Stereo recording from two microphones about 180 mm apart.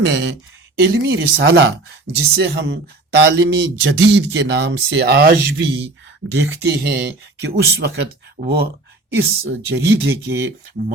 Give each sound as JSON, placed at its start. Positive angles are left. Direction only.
{"t": 0.1, "sound": "speech", "side_deg": -75}
{"t": 0.8, "sound": "speech", "side_deg": -65}
{"t": 6.3, "sound": "speech", "side_deg": -70}
{"t": 9.1, "sound": "speech", "side_deg": -75}